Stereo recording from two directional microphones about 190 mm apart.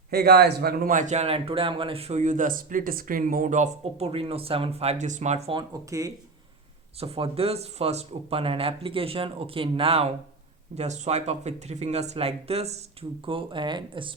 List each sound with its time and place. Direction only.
0.1 s speech: 55° right (ahead or behind); by 5.6 s 30° right (ahead or behind)
5.9 s speech: 15° right (ahead or behind)
7.0 s speech: 30° right (ahead or behind)